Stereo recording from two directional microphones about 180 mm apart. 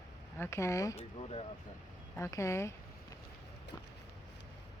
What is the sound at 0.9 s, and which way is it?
Speech, 35° left (ahead or behind).